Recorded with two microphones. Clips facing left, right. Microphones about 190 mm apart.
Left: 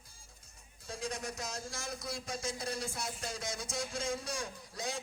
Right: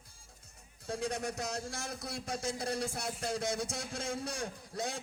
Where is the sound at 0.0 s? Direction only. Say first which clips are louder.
Right 1 dB; 60° right (ahead or behind).